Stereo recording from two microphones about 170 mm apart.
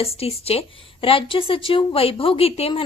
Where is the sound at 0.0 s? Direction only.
35° left (ahead or behind).